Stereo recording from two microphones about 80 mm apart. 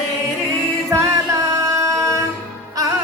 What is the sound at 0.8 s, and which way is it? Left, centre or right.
Music, right.